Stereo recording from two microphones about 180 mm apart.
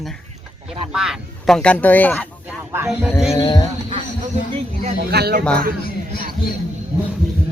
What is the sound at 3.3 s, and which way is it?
Speech, 25° left (ahead or behind).